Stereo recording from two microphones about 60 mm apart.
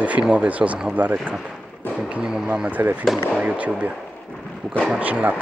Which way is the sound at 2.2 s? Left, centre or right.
Centre.